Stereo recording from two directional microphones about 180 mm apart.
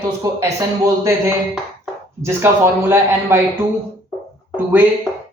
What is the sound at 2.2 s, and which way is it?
A man's voice, 15° right (ahead or behind).